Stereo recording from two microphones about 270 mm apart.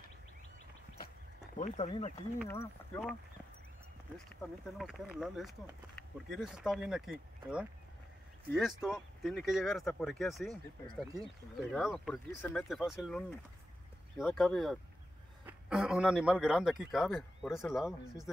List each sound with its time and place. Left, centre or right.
1.6 s speech: left
2.4 s speech: centre
4.4 s speech: centre
11.6 s speech: centre
14.2 s speech: centre